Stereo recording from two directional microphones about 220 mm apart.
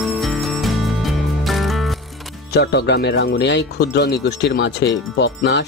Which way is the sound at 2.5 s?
50° left (ahead or behind).